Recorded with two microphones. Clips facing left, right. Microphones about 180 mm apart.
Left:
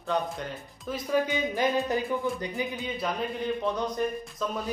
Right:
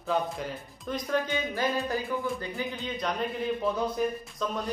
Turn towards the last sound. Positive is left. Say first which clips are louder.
# left 1 dB
turn(degrees=0)  # may be behind; listen again after turning